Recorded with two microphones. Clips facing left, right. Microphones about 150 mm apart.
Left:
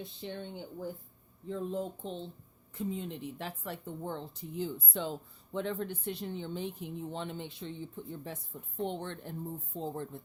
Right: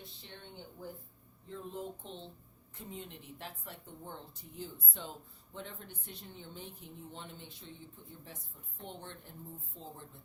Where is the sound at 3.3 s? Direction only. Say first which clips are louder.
Left 7 dB; 90° left.